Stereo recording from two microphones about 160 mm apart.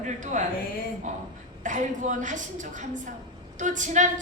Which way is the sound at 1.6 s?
50° right (ahead or behind).